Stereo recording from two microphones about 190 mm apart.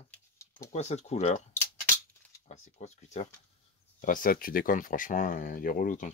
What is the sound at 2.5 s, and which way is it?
Speech, 35° left (ahead or behind).